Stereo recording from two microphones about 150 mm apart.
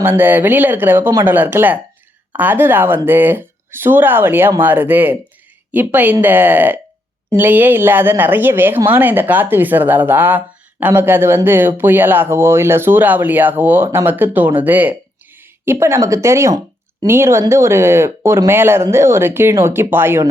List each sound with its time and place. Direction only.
0.0 s speech: 15° right (ahead or behind)